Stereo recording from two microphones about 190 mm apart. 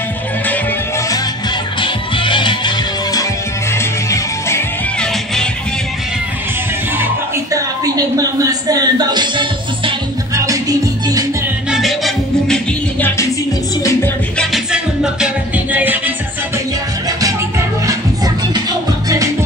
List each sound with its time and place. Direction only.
1.8 s music: 25° left (ahead or behind)
7.5 s a sound: 20° right (ahead or behind)
11.7 s music: centre (ahead or behind)
14.4 s music: 5° right (ahead or behind)
17.8 s music: 20° right (ahead or behind)